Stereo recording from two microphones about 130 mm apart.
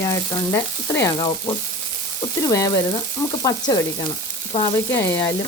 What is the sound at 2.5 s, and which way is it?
Frying, 25° left (ahead or behind).